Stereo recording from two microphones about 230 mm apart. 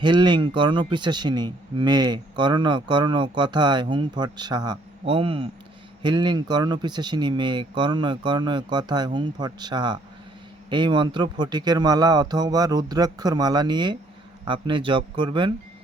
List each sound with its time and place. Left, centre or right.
0.0 s speech: centre